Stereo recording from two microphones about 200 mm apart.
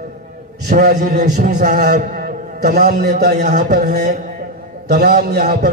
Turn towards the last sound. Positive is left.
turn(degrees=-50)  # may be behind; listen again after turning